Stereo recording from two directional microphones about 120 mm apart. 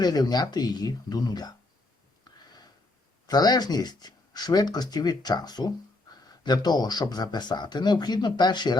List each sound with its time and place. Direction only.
0.0 s speech: 35° left (ahead or behind)
3.2 s speech: 35° left (ahead or behind)